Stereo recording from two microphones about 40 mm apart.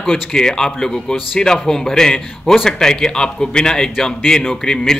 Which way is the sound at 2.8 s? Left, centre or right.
Centre.